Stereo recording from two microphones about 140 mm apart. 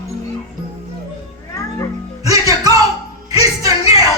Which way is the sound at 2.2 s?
25° right (ahead or behind).